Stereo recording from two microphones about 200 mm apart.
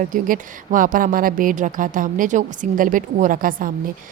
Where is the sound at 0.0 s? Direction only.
40° right (ahead or behind).